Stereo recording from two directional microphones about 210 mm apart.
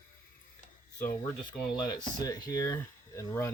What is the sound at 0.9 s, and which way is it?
Speech, 40° left (ahead or behind).